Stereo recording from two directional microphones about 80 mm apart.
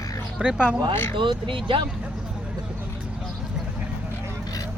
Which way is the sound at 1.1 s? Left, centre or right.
Right.